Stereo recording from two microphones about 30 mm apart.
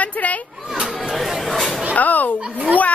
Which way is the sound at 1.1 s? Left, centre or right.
Centre.